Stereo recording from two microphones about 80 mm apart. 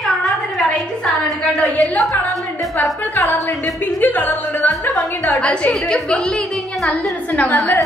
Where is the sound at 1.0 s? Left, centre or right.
Centre.